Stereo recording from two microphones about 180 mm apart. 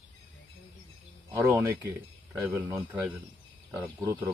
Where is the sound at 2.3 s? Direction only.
5° right (ahead or behind).